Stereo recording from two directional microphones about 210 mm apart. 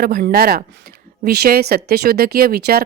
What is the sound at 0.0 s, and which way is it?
Speech, 45° right (ahead or behind).